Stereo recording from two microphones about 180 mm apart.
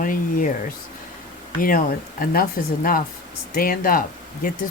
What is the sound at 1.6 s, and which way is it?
Speech, 55° left (ahead or behind).